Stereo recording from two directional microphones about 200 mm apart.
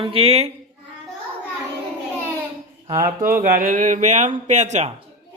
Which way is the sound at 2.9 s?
15° right (ahead or behind).